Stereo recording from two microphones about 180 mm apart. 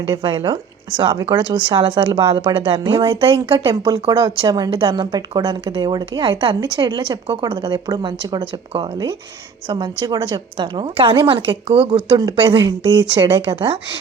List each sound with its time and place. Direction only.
0.1 s speech: 25° right (ahead or behind)